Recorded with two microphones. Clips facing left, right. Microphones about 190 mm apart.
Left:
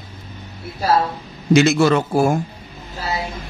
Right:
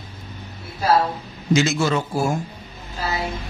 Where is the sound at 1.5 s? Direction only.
65° left (ahead or behind).